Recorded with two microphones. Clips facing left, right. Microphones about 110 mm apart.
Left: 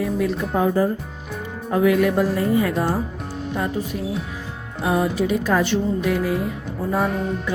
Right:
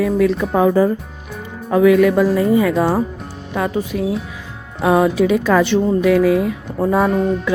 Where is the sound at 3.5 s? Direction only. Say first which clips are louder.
Right 6 dB; 90° right.